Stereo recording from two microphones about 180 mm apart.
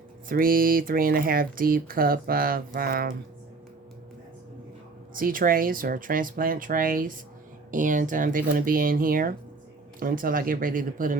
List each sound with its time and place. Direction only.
0.3 s speech: 50° right (ahead or behind)
5.1 s speech: 50° right (ahead or behind)